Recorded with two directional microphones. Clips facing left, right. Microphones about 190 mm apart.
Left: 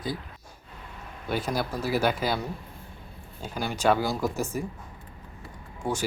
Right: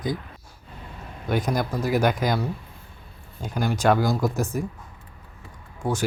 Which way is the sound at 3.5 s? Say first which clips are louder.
Right 3 dB; 5° right (ahead or behind).